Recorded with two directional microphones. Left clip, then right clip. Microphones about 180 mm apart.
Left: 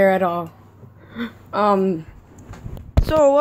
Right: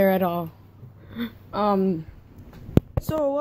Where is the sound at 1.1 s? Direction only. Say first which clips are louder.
Left 5 dB; centre (ahead or behind).